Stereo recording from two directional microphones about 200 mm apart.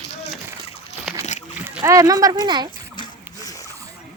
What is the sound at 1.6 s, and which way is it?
Speech, 15° right (ahead or behind).